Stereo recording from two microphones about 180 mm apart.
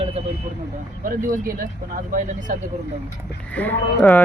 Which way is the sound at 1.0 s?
50° right (ahead or behind).